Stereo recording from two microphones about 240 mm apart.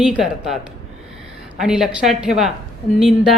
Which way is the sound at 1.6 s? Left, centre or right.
Centre.